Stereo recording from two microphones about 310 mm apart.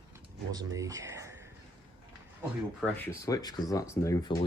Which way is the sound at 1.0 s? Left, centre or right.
Centre.